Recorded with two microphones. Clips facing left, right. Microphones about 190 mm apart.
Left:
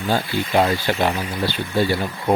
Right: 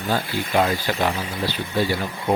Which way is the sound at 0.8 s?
30° left (ahead or behind).